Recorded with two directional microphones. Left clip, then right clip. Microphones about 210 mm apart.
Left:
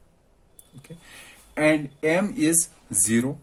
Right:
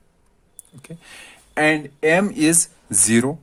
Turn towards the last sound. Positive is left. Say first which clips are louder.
# right 6 dB
turn(degrees=-45)  # may be behind; listen again after turning